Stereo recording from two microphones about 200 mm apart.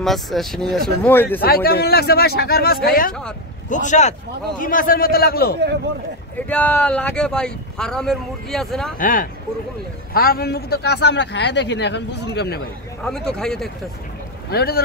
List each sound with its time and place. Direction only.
0.0 s speech: centre (ahead or behind)
1.4 s speech: 50° left (ahead or behind)
3.1 s speech: 5° left (ahead or behind)
3.6 s speech: 40° left (ahead or behind)
6.3 s speech: 10° left (ahead or behind)
8.9 s a man's voice: 45° left (ahead or behind)
13.0 s speech: 5° left (ahead or behind)
14.5 s speech: 50° left (ahead or behind)